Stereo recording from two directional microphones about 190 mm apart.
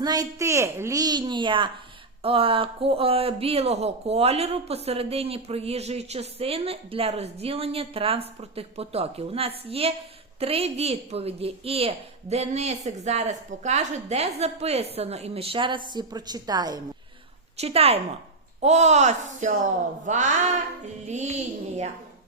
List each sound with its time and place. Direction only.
0.0 s a child's voice: 20° right (ahead or behind)
17.6 s speech: 30° right (ahead or behind)